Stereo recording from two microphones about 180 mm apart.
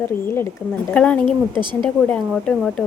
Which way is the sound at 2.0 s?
5° left (ahead or behind).